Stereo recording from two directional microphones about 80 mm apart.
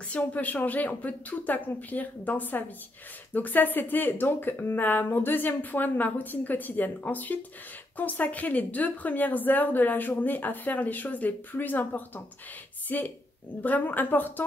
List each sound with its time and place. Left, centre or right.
0.1 s a woman's voice: centre